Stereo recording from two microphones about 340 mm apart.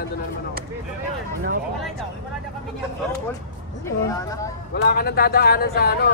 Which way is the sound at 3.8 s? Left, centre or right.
Centre.